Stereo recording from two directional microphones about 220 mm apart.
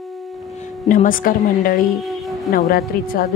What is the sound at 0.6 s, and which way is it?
Speech, 35° left (ahead or behind).